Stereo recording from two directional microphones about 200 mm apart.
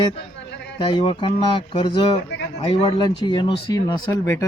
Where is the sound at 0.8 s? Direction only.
25° left (ahead or behind).